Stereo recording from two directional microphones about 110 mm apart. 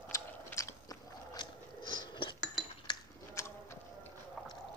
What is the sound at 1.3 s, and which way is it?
Biting, 45° left (ahead or behind).